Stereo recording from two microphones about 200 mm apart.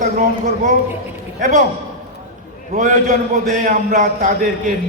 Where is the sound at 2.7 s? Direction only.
40° right (ahead or behind).